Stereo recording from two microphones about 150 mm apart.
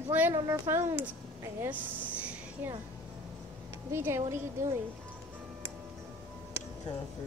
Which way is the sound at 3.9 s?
15° right (ahead or behind).